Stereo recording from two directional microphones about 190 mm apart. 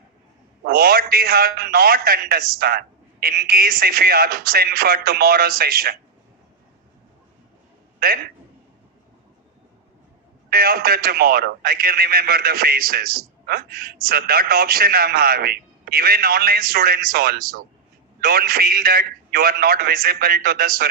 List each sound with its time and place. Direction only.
0.6 s speech: 50° right (ahead or behind)
7.9 s a man's voice: 55° right (ahead or behind)
10.5 s speech: 50° right (ahead or behind)